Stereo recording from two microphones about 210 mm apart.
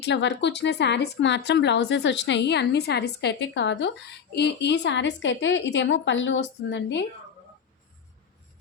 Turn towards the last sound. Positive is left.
turn(degrees=55)  # may be behind; listen again after turning